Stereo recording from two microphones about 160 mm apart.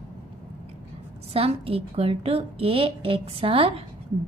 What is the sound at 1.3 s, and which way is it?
A woman's voice, 35° right (ahead or behind).